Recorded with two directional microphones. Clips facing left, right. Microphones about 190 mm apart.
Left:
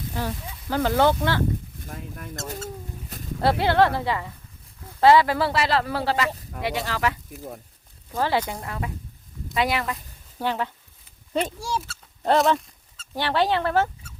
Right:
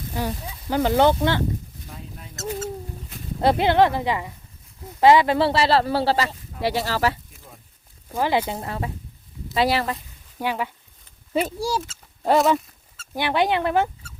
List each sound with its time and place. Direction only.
0.1 s speech: 15° right (ahead or behind)
1.8 s speech: 55° left (ahead or behind)
3.4 s speech: 20° right (ahead or behind); by 7.2 s 35° right (ahead or behind)
8.1 s speech: 15° right (ahead or behind); by 10.0 s 35° right (ahead or behind)
10.3 s speech: 10° right (ahead or behind)
13.1 s speech: 15° right (ahead or behind)